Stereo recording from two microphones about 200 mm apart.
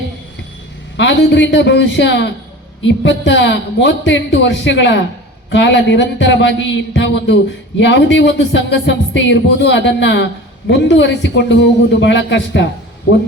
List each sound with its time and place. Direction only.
0.9 s speech: 65° left (ahead or behind)